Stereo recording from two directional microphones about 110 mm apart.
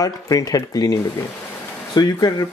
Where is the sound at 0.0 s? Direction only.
35° left (ahead or behind).